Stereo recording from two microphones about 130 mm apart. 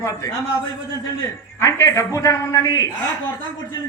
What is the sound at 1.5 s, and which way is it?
A man's voice, 25° left (ahead or behind).